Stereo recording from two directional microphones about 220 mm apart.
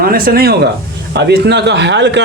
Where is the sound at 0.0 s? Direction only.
40° right (ahead or behind).